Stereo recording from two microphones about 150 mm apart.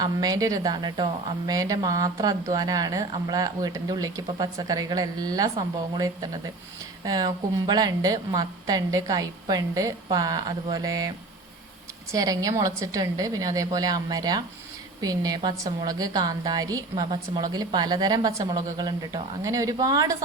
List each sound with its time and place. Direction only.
0.0 s speech: 25° right (ahead or behind)
12.1 s speech: 25° right (ahead or behind)